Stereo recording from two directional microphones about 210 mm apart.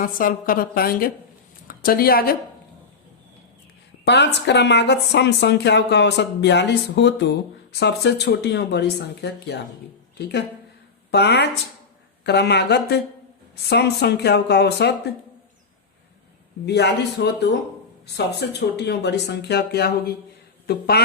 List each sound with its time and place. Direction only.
0.0 s a woman's voice: 40° left (ahead or behind)
4.0 s speech: 55° left (ahead or behind)
16.6 s speech: 50° left (ahead or behind)